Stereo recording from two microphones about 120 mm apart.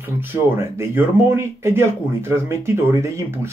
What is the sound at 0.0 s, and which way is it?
Speech, 20° right (ahead or behind).